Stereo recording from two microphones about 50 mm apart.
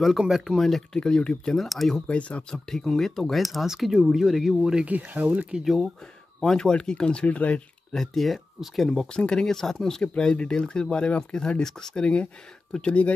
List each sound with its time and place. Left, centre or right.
0.3 s speech: centre
0.9 s speech: centre
1.6 s speech: centre
2.0 s speech: left
2.5 s speech: centre
4.8 s speech: right
5.6 s speech: centre
6.4 s speech: centre
7.9 s speech: centre; by 13.1 s left